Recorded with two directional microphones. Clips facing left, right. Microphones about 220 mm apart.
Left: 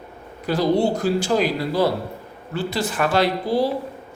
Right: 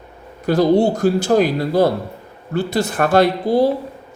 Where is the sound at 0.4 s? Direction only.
55° right (ahead or behind).